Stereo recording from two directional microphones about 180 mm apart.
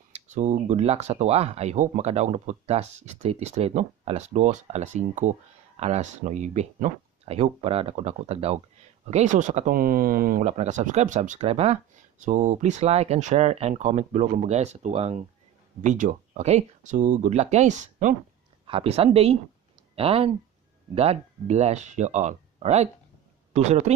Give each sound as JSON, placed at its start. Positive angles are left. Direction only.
{"t": 0.1, "sound": "speech", "side_deg": -40}
{"t": 18.7, "sound": "speech", "side_deg": -30}